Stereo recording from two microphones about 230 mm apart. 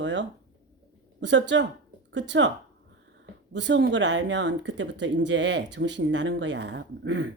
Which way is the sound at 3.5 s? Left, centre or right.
Right.